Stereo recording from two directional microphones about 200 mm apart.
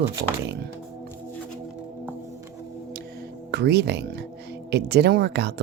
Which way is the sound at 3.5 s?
55° right (ahead or behind).